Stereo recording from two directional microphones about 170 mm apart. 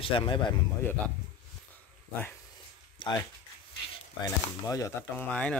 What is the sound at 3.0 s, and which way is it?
Speech, 30° left (ahead or behind).